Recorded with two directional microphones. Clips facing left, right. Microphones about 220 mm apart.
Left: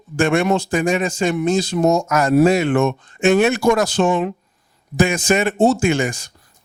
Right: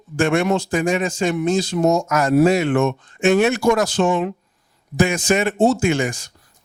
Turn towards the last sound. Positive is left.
turn(degrees=15)  # may be behind; listen again after turning